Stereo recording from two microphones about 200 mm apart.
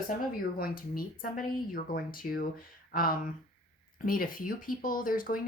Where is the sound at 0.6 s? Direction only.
45° left (ahead or behind).